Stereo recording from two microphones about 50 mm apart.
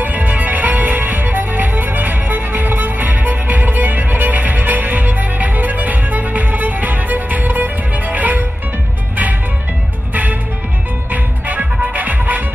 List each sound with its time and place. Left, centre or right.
0.0 s music: right
11.1 s music: right